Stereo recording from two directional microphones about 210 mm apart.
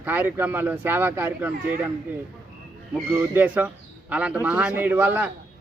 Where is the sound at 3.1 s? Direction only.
10° right (ahead or behind).